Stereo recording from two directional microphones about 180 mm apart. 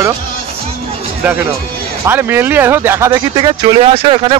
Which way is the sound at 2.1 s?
10° right (ahead or behind).